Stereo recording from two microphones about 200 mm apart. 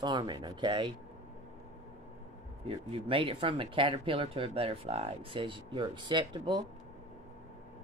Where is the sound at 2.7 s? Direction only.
25° right (ahead or behind).